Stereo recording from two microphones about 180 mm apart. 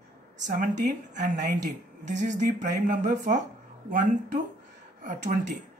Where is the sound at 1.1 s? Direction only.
45° right (ahead or behind).